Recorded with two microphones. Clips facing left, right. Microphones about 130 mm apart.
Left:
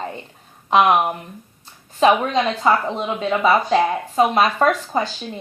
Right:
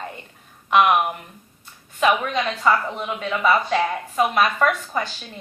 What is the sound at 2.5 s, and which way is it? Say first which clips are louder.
Speech: left 2 dB; 25° left (ahead or behind).